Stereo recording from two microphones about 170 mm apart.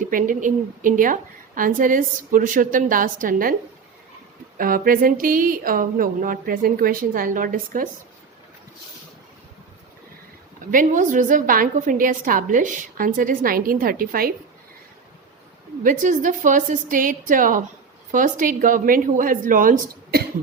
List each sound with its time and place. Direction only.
0.0 s a woman's voice: 50° right (ahead or behind)
4.5 s a woman's voice: 55° right (ahead or behind)
10.7 s a woman's voice: 50° right (ahead or behind)
15.8 s a woman's voice: 50° right (ahead or behind)